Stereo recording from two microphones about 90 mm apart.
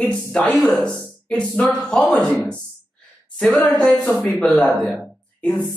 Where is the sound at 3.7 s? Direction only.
15° left (ahead or behind).